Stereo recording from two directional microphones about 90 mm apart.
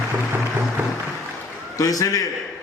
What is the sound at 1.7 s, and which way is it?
Speech, 40° left (ahead or behind).